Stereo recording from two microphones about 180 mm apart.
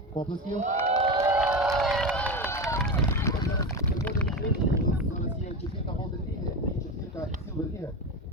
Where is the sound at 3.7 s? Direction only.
10° left (ahead or behind).